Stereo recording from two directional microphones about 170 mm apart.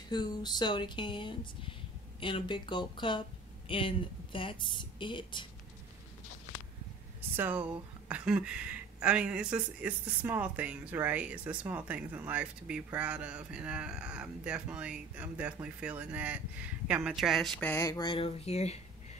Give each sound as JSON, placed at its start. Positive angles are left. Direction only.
{"t": 0.1, "sound": "speech", "side_deg": 25}
{"t": 7.2, "sound": "speech", "side_deg": -10}
{"t": 17.6, "sound": "speech", "side_deg": 15}